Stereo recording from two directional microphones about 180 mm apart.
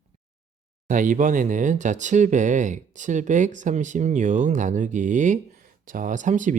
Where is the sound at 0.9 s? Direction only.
45° right (ahead or behind).